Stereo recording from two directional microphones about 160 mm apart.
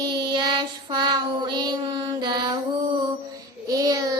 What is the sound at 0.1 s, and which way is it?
Child singing, 30° right (ahead or behind).